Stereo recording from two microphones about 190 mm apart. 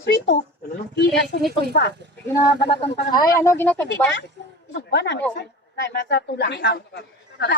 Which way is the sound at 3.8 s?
70° left (ahead or behind).